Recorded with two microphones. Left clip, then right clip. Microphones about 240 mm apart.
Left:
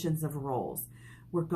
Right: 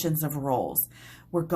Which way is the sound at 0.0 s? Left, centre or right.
Right.